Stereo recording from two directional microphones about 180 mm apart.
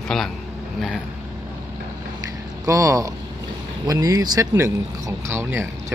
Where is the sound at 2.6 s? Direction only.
15° right (ahead or behind).